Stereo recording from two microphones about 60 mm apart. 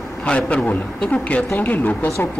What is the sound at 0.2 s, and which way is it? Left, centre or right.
A man's voice, centre.